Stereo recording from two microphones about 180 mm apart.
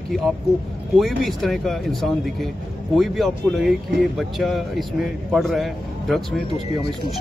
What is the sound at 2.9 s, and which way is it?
Speech, centre (ahead or behind).